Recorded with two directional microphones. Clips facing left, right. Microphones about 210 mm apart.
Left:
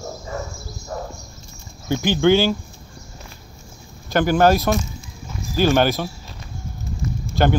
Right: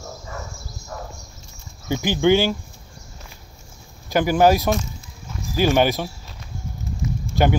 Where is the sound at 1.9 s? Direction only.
10° right (ahead or behind).